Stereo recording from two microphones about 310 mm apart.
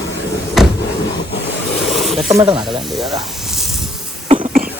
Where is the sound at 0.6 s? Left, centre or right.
Centre.